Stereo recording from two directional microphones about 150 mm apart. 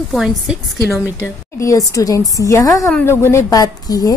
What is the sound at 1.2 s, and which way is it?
A woman's voice, 20° left (ahead or behind).